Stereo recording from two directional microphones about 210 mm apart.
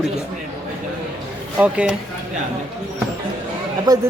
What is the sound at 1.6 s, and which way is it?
Speech, 5° right (ahead or behind).